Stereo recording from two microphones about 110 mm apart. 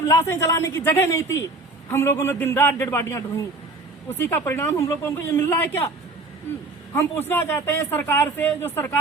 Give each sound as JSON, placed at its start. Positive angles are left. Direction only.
{"t": 0.0, "sound": "speech", "side_deg": 25}
{"t": 6.9, "sound": "speech", "side_deg": 20}